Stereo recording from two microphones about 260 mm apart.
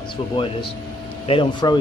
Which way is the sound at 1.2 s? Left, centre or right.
Centre.